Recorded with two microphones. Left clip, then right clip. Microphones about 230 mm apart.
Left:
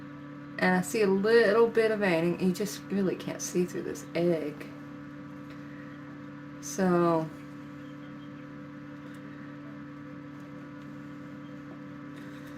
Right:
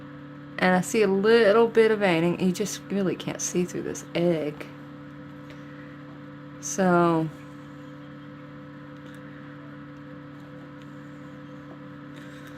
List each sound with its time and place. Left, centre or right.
0.5 s speech: right
6.7 s speech: right